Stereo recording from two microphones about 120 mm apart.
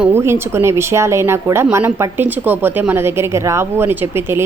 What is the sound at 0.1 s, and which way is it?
Speech, 20° right (ahead or behind).